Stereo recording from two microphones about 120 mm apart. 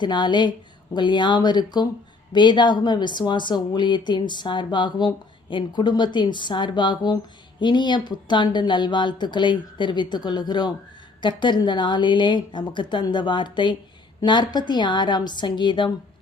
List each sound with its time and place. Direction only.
0.0 s speech: 40° left (ahead or behind)